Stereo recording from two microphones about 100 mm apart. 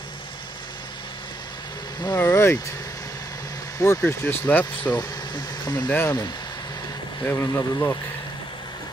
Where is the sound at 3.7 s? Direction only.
35° left (ahead or behind).